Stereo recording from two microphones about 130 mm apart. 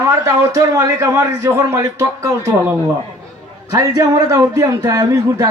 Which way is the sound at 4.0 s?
30° right (ahead or behind).